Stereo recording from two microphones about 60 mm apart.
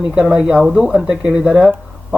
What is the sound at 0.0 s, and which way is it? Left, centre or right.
Speech, centre.